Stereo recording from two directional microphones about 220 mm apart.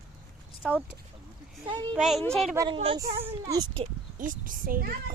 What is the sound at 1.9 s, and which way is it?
Speech, centre (ahead or behind).